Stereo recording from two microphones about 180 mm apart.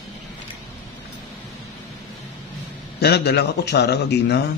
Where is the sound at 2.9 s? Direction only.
65° left (ahead or behind).